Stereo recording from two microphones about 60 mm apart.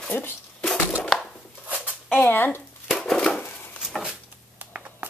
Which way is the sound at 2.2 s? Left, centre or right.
Left.